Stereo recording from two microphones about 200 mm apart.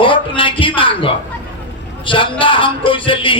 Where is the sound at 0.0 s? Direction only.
25° left (ahead or behind).